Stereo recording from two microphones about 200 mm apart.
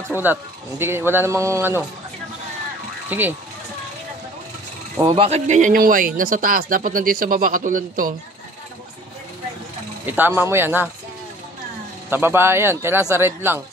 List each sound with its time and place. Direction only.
0.2 s speech: 10° right (ahead or behind)
3.1 s speech: 10° right (ahead or behind)
5.0 s speech: 25° right (ahead or behind); by 8.1 s 45° right (ahead or behind)
10.0 s speech: 10° right (ahead or behind)
12.1 s speech: 10° right (ahead or behind)